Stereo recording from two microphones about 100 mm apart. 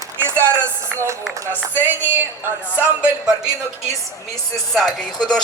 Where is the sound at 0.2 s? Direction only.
20° right (ahead or behind).